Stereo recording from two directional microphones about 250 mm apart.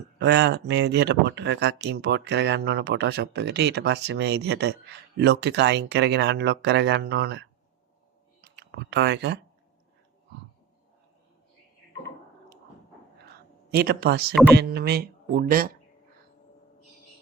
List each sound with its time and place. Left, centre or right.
0.2 s speech: right
13.7 s speech: right